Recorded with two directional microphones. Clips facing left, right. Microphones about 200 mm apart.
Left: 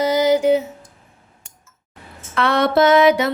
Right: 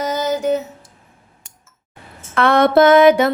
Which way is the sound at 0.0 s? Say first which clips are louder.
Left 4 dB; 10° left (ahead or behind).